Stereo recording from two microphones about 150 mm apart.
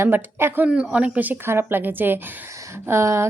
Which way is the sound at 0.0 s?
15° right (ahead or behind).